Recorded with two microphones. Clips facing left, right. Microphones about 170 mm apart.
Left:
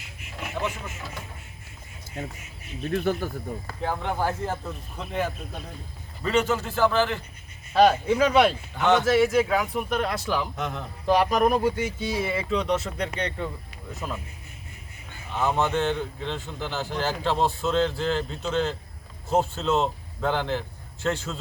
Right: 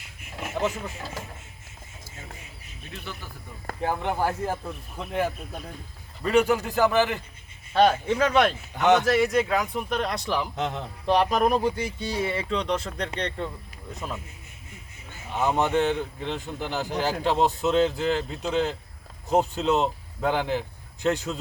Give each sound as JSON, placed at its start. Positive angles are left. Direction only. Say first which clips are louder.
{"t": 0.6, "sound": "speech", "louder": "right 5 dB", "side_deg": -35}
{"t": 2.9, "sound": "speech", "louder": "left 14 dB", "side_deg": 50}
{"t": 3.8, "sound": "speech", "louder": "right 1 dB", "side_deg": -10}
{"t": 6.3, "sound": "speech", "louder": "right 3 dB", "side_deg": -10}
{"t": 7.7, "sound": "speech", "louder": "left 2 dB", "side_deg": 5}
{"t": 8.5, "sound": "speech", "louder": "right 1 dB", "side_deg": -20}
{"t": 9.0, "sound": "speech", "louder": "left 2 dB", "side_deg": 0}
{"t": 10.6, "sound": "a man's voice", "louder": "right 2 dB", "side_deg": -25}
{"t": 11.0, "sound": "speech", "louder": "left 1 dB", "side_deg": 5}
{"t": 15.3, "sound": "speech", "louder": "right 1 dB", "side_deg": -15}